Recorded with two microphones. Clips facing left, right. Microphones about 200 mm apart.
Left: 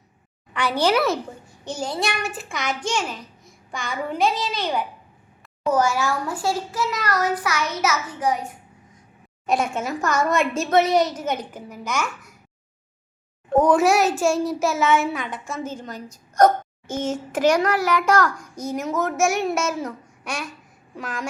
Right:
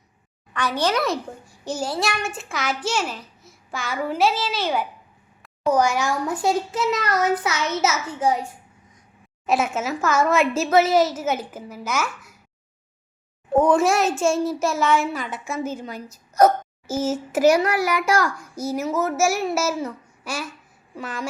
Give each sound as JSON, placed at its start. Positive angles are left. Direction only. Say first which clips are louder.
{"t": 0.5, "sound": "a child's voice", "louder": "left 2 dB", "side_deg": 10}
{"t": 1.5, "sound": "a child's voice", "louder": "right 2 dB", "side_deg": -5}
{"t": 5.7, "sound": "a child's voice", "louder": "even", "side_deg": -15}
{"t": 9.5, "sound": "a child's voice", "louder": "right 1 dB", "side_deg": -5}
{"t": 13.5, "sound": "a child's voice", "louder": "left 1 dB", "side_deg": 0}